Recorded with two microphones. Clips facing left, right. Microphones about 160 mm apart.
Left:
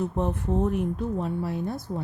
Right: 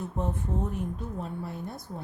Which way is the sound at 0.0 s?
80° left.